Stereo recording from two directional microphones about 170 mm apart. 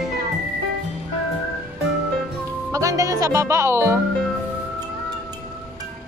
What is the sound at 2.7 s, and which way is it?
Speech, 20° right (ahead or behind).